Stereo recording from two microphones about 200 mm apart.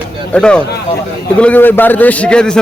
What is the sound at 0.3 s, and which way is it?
A man's voice, 5° left (ahead or behind).